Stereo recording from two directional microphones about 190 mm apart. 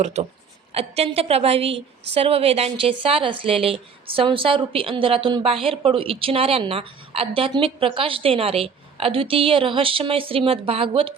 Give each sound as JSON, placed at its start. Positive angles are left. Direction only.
{"t": 0.0, "sound": "a woman's voice", "side_deg": -35}